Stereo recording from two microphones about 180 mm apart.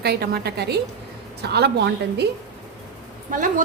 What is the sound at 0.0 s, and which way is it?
A woman's voice, 60° right (ahead or behind).